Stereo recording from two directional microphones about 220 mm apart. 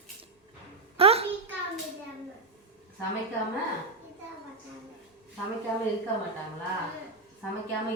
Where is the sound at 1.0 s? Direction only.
25° right (ahead or behind).